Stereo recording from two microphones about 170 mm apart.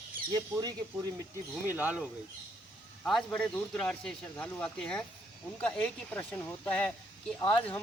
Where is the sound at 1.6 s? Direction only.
10° right (ahead or behind).